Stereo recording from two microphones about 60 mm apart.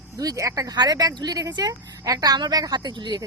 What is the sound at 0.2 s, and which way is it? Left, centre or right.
Speech, right.